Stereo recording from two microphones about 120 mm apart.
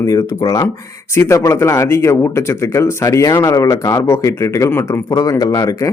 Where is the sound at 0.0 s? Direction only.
30° left (ahead or behind).